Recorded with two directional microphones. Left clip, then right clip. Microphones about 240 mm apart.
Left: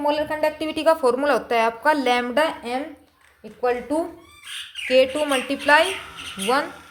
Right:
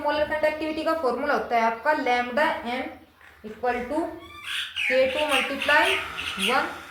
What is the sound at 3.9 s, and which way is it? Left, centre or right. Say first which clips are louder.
Speech: left 4 dB; left.